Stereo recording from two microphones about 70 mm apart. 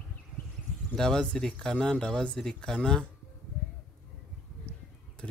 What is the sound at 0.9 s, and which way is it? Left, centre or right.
Speech, centre.